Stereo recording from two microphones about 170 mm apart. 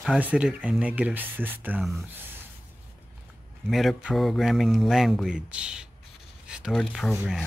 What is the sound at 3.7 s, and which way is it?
Speech, centre (ahead or behind).